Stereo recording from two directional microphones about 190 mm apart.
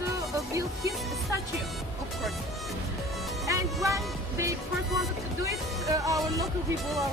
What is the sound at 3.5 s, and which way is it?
Music, 15° right (ahead or behind).